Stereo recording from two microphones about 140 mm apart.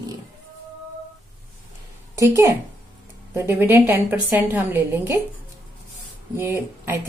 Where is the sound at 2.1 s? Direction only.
20° right (ahead or behind).